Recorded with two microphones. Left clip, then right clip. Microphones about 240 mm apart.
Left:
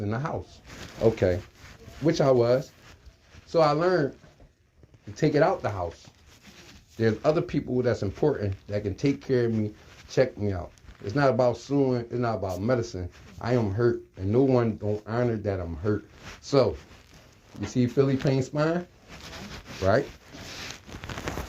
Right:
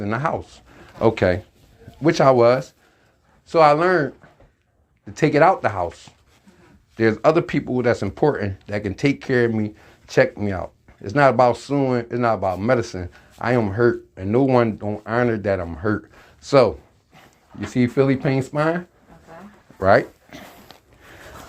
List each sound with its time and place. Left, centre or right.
0.0 s speech: right
5.1 s speech: right
6.9 s speech: right
19.8 s a sound: right